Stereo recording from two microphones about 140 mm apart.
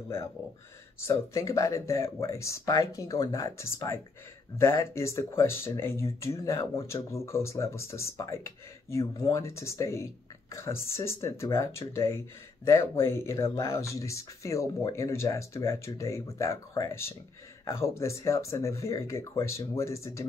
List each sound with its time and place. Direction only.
1.0 s speech: 20° left (ahead or behind)